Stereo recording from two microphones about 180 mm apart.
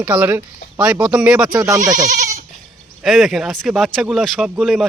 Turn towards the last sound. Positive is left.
turn(degrees=0)  # may be behind; listen again after turning